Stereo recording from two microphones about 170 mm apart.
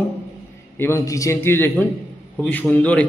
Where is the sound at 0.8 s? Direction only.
15° left (ahead or behind).